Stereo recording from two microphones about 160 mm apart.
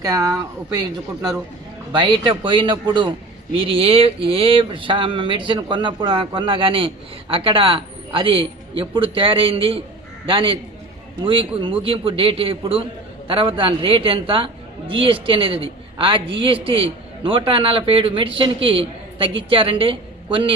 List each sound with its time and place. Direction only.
0.0 s a man's voice: 20° right (ahead or behind)